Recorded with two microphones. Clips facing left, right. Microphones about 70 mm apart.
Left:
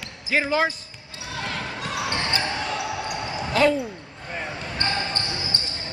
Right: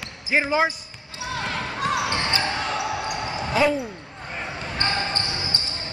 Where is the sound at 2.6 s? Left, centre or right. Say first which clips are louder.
Right 2 dB; centre.